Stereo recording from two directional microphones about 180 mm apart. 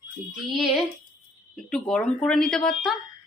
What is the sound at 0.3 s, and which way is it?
Speech, centre (ahead or behind).